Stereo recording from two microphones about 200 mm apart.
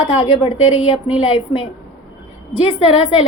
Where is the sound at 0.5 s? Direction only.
90° left.